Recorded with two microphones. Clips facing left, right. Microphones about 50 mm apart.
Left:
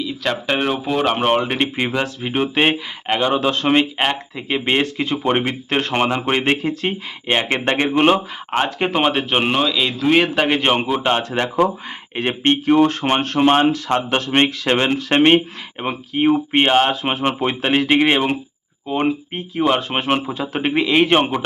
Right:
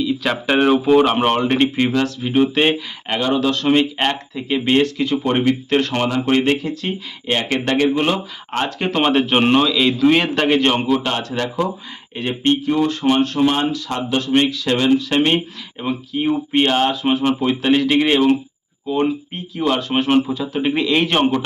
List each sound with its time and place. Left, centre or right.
0.0 s a man's voice: centre
1.3 s a man's voice: centre; by 3.8 s left
3.9 s a man's voice: centre
4.4 s speech: left
8.4 s a man's voice: centre
10.7 s speech: left
20.7 s a man's voice: centre